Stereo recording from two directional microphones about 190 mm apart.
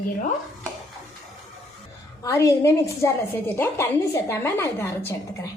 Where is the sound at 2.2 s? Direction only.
15° left (ahead or behind).